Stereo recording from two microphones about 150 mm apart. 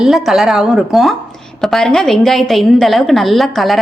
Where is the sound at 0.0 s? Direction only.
Centre (ahead or behind).